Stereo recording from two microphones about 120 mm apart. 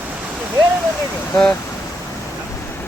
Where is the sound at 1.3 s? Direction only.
10° left (ahead or behind).